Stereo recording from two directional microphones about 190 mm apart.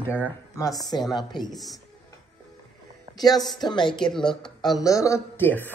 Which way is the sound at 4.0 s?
Centre (ahead or behind).